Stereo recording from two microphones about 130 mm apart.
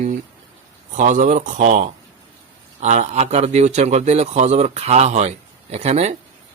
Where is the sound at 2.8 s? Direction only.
60° right (ahead or behind).